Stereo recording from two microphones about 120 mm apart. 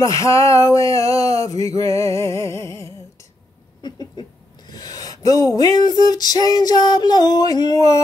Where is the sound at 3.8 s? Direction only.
35° left (ahead or behind).